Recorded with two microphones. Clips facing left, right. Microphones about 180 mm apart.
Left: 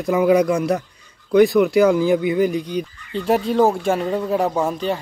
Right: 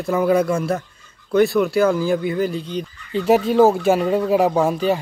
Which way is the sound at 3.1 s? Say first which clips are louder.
Right 3 dB; 5° right (ahead or behind).